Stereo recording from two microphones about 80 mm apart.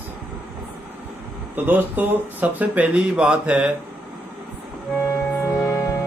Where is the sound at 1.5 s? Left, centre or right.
Right.